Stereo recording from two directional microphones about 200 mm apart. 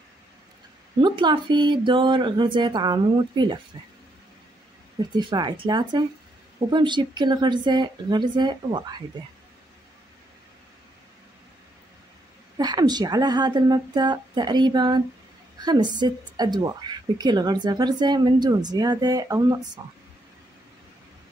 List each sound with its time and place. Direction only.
1.0 s a woman's voice: 25° right (ahead or behind)
5.1 s a woman's voice: 20° right (ahead or behind)
12.5 s a woman's voice: 20° right (ahead or behind)